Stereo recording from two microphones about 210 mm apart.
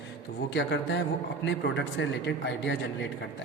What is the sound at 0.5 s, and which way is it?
A man's voice, 60° left (ahead or behind).